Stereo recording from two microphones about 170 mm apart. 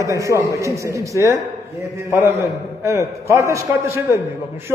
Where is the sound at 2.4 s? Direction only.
15° right (ahead or behind).